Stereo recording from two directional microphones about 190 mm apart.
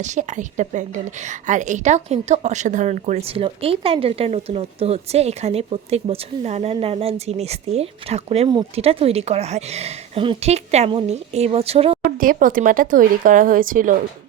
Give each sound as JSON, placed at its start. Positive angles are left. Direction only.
{"t": 0.0, "sound": "a woman's voice", "side_deg": -40}
{"t": 12.1, "sound": "speech", "side_deg": -45}